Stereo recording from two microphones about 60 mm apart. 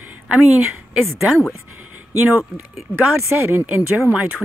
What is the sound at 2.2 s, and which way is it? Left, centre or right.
Speech, right.